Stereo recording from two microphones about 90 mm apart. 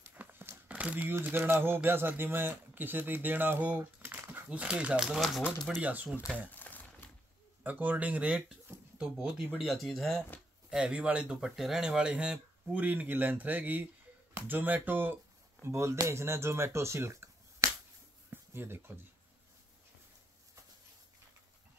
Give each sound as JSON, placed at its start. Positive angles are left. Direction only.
{"t": 0.1, "sound": "crumpling", "side_deg": -20}
{"t": 0.7, "sound": "speech", "side_deg": -15}
{"t": 5.8, "sound": "speech", "side_deg": -15}
{"t": 6.5, "sound": "typewriter", "side_deg": 20}
{"t": 7.6, "sound": "speech", "side_deg": -20}
{"t": 9.6, "sound": "speech", "side_deg": 0}
{"t": 10.7, "sound": "speech", "side_deg": -10}
{"t": 15.6, "sound": "speech", "side_deg": -30}
{"t": 18.3, "sound": "a sound", "side_deg": -25}